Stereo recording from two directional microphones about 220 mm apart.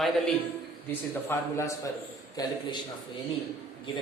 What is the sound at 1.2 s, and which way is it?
A woman's voice, 10° left (ahead or behind).